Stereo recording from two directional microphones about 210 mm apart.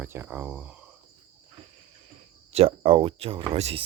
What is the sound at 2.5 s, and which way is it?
Speech, 25° right (ahead or behind).